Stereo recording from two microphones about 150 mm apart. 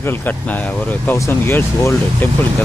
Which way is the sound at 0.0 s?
15° left (ahead or behind).